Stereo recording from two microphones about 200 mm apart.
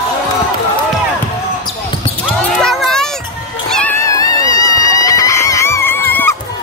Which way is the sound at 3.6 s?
5° left (ahead or behind).